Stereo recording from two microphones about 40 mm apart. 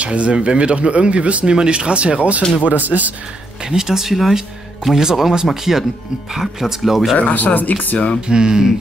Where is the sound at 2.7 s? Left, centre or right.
Right.